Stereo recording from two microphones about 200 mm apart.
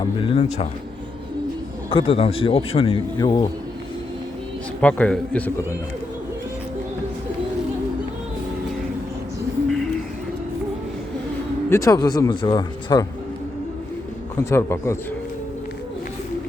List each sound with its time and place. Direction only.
0.0 s speech: 30° left (ahead or behind)
1.9 s a man's voice: 25° left (ahead or behind)
4.8 s a man's voice: 5° left (ahead or behind)
9.6 s music: centre (ahead or behind)
11.7 s a man's voice: 15° left (ahead or behind)
14.3 s a man's voice: 15° left (ahead or behind)